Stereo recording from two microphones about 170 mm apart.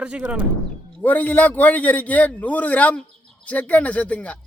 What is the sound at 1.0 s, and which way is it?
Speech, 10° left (ahead or behind).